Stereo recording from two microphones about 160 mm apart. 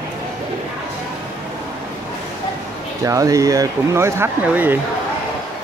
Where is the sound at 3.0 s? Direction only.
20° right (ahead or behind).